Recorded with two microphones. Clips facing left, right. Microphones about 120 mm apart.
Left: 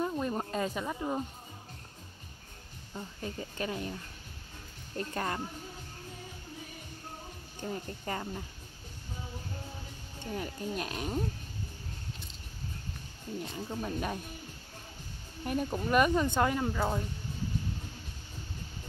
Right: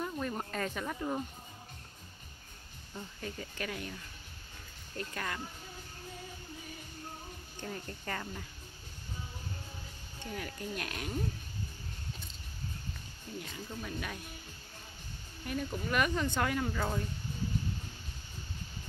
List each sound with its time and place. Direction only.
0.0 s music: 20° left (ahead or behind)
2.9 s speech: 25° left (ahead or behind)
7.6 s speech: 20° left (ahead or behind)
10.3 s speech: 25° left (ahead or behind)
13.4 s speech: 35° left (ahead or behind)
15.4 s speech: 30° left (ahead or behind)